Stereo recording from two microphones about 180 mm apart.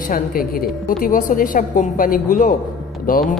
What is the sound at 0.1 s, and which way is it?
A man's voice, 50° left (ahead or behind).